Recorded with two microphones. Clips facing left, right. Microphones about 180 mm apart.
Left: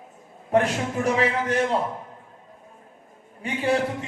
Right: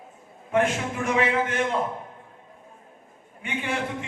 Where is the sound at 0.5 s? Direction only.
35° left (ahead or behind).